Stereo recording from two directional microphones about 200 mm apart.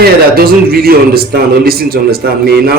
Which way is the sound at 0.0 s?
50° right (ahead or behind).